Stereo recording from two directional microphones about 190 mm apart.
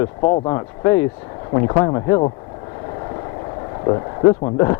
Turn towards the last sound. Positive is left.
turn(degrees=20)  # may be behind; listen again after turning